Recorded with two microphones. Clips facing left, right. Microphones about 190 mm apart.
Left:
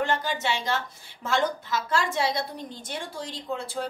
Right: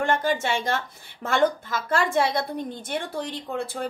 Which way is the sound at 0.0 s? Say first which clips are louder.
Right 3 dB; 50° right (ahead or behind).